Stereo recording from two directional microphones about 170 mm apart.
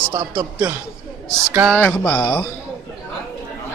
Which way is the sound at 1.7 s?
5° left (ahead or behind).